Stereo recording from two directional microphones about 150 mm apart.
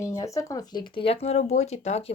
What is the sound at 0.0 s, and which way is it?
Speech, 20° left (ahead or behind).